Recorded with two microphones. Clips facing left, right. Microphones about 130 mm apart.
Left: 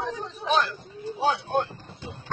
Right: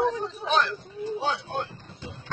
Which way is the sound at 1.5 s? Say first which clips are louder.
Left 6 dB; 50° left (ahead or behind).